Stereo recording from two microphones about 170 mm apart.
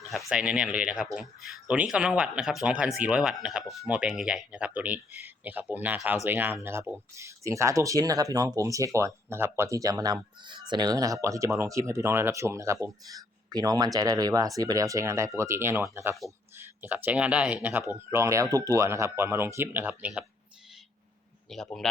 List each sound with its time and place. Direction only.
0.3 s speech: 5° right (ahead or behind)
21.5 s a man's voice: centre (ahead or behind)